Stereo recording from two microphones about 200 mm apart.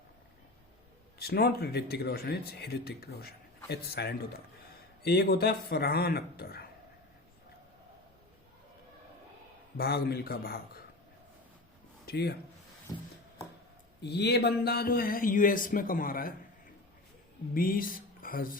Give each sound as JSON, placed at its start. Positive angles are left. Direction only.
{"t": 1.2, "sound": "speech", "side_deg": 50}
{"t": 9.7, "sound": "speech", "side_deg": 50}
{"t": 12.0, "sound": "speech", "side_deg": 55}
{"t": 12.9, "sound": "a sound", "side_deg": 20}
{"t": 14.0, "sound": "speech", "side_deg": 55}
{"t": 17.5, "sound": "speech", "side_deg": 45}